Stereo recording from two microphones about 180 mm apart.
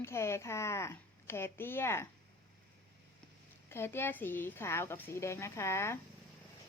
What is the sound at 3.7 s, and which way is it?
A woman's voice, 15° left (ahead or behind).